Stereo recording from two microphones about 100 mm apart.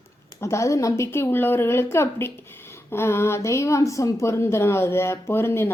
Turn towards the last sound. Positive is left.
turn(degrees=25)  # may be behind; listen again after turning